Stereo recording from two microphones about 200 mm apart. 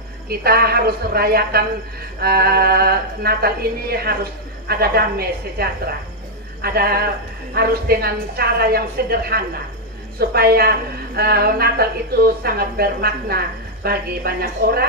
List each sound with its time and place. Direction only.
0.3 s speech: 50° right (ahead or behind)